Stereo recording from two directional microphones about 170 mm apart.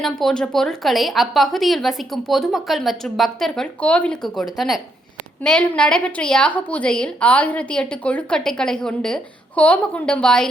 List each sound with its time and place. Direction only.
0.0 s a woman's voice: centre (ahead or behind)